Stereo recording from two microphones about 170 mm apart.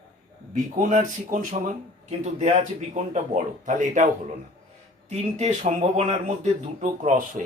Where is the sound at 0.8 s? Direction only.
50° right (ahead or behind).